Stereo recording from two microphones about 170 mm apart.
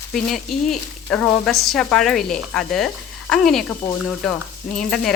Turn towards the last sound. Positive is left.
turn(degrees=0)  # may be behind; listen again after turning